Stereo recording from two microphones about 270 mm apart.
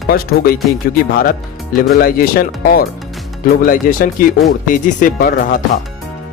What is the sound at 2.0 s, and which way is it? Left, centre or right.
Speech, left.